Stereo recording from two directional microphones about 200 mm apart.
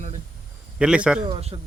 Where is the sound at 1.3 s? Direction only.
30° right (ahead or behind).